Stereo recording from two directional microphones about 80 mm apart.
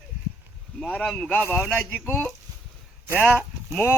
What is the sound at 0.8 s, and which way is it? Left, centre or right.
Speech, centre.